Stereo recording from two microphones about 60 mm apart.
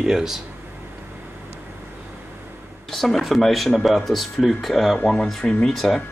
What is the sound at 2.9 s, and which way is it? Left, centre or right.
Speech, centre.